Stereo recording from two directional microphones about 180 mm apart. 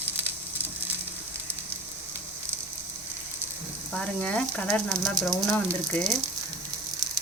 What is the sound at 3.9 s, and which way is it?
Sizzle, 5° left (ahead or behind).